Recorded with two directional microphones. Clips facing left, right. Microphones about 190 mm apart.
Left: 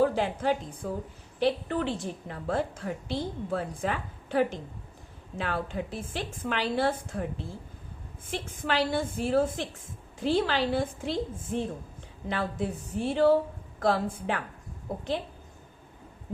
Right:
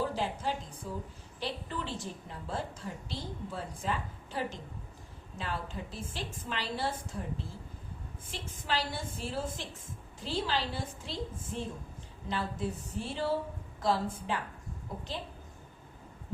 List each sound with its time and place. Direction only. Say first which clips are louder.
0.0 s a woman's voice: left 8 dB; 65° left (ahead or behind)